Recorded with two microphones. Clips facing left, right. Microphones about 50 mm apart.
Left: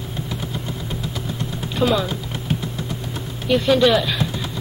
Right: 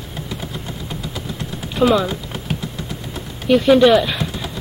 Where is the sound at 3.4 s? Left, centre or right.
Centre.